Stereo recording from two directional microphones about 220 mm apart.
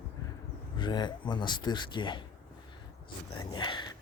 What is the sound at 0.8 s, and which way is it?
Speech, 20° left (ahead or behind).